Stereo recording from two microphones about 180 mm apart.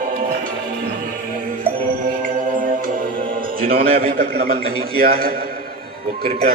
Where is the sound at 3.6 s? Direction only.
50° right (ahead or behind).